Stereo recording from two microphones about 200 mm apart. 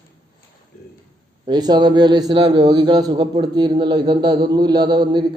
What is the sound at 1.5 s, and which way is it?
A man's voice, 20° right (ahead or behind).